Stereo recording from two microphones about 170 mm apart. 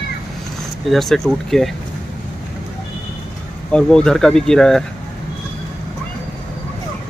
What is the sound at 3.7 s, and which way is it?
Speech, 5° left (ahead or behind).